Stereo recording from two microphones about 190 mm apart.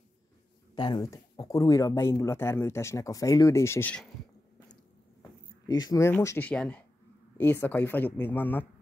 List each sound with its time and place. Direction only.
0.7 s speech: 20° left (ahead or behind)
5.7 s speech: 20° left (ahead or behind)